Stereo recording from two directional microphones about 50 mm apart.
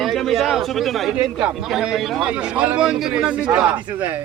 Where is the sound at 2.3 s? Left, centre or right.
Right.